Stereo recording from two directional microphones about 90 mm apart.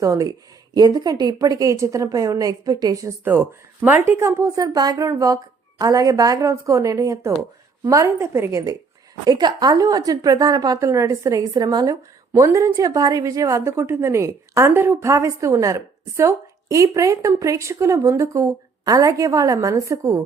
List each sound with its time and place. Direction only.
0.0 s a woman's voice: 40° right (ahead or behind)
3.2 s a woman's voice: 20° right (ahead or behind)
9.2 s a woman's voice: 50° right (ahead or behind); by 11.4 s 35° right (ahead or behind)
11.5 s a woman's voice: 50° right (ahead or behind)
12.3 s a woman's voice: 35° right (ahead or behind)